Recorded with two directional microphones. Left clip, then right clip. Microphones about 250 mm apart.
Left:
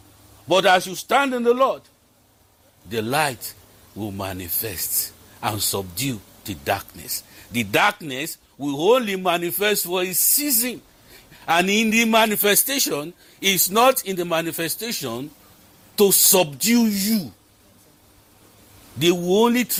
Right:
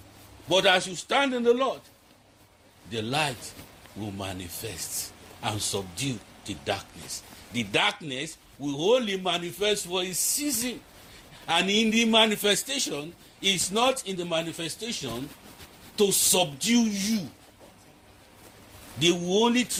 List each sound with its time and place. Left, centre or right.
0.4 s a man's voice: left
2.9 s a man's voice: left
18.9 s a man's voice: left